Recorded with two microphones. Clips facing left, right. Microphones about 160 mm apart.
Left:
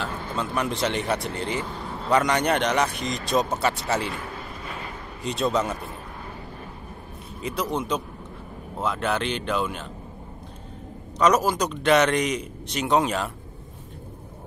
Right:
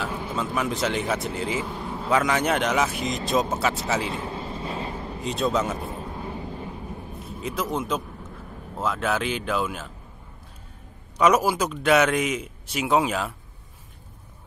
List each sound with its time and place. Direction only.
0.0 s a man's voice: 10° right (ahead or behind)
4.1 s vehicle: 25° right (ahead or behind)
5.2 s a man's voice: centre (ahead or behind)
5.9 s vehicle: 20° right (ahead or behind)
7.2 s a man's voice: centre (ahead or behind)
11.1 s a man's voice: 10° right (ahead or behind)